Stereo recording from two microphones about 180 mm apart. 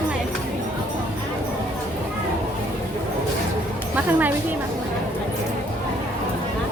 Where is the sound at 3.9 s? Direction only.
10° right (ahead or behind).